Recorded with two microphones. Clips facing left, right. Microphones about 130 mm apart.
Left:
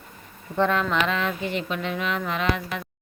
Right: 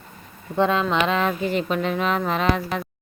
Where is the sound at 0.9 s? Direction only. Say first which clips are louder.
Right 4 dB; 35° right (ahead or behind).